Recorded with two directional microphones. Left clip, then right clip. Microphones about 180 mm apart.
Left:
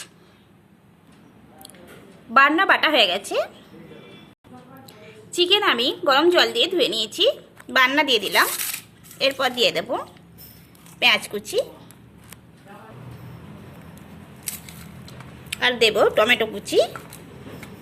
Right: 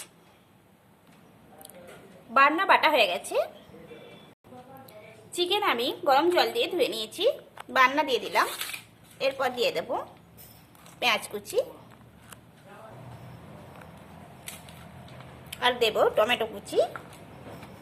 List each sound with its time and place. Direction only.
2.3 s a woman's voice: 10° left (ahead or behind)
4.9 s a woman's voice: 10° left (ahead or behind)
11.0 s a woman's voice: 10° left (ahead or behind)
15.6 s a woman's voice: 20° left (ahead or behind)